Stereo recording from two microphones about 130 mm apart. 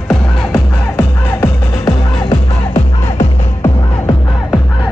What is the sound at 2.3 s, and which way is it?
Music, 55° left (ahead or behind).